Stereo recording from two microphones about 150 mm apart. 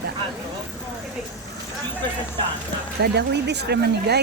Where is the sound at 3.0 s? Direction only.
90° right.